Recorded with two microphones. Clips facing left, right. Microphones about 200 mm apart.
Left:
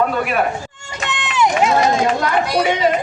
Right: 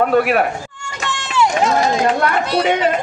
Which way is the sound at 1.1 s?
20° left (ahead or behind).